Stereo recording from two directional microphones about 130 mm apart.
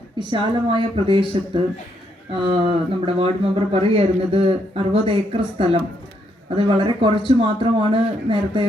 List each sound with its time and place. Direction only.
0.2 s speech: 40° right (ahead or behind)